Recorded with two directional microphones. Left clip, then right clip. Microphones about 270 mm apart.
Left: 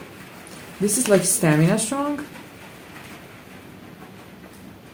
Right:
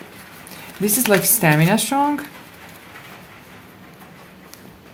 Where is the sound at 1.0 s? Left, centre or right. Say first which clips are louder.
Right 2 dB; right.